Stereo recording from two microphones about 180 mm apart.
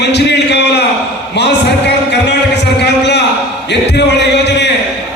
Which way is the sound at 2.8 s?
70° left (ahead or behind).